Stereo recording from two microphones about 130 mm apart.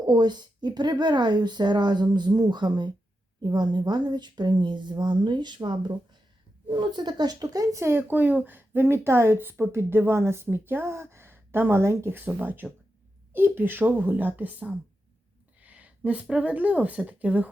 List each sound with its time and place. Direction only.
0.0 s a woman's voice: 35° right (ahead or behind); by 17.5 s 10° right (ahead or behind)